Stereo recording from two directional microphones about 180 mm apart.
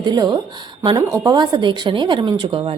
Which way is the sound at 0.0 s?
25° right (ahead or behind).